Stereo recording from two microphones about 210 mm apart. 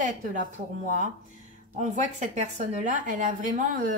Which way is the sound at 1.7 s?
35° right (ahead or behind).